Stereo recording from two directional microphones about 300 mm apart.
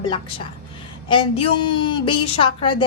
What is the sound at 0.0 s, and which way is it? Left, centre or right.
A woman's voice, centre.